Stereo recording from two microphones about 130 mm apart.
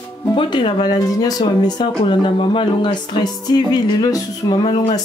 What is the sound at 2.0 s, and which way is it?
Speech, 45° left (ahead or behind).